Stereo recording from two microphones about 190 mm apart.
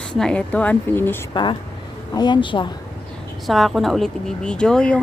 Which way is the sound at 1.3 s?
25° left (ahead or behind).